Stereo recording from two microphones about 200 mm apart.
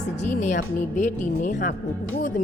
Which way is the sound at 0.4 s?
40° left (ahead or behind).